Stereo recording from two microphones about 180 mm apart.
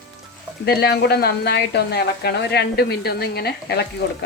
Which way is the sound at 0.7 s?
65° left (ahead or behind).